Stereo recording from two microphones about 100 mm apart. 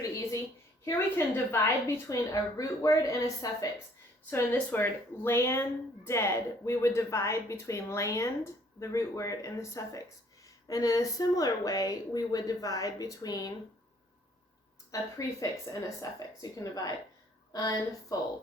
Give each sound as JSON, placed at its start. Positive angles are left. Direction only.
{"t": 0.9, "sound": "speech", "side_deg": 25}
{"t": 4.7, "sound": "speech", "side_deg": 25}
{"t": 14.9, "sound": "speech", "side_deg": 35}